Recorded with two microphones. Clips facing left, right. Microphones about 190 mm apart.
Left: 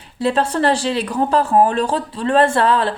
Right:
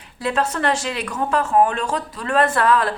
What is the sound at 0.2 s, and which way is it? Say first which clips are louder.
A woman's voice: left 4 dB; 30° left (ahead or behind).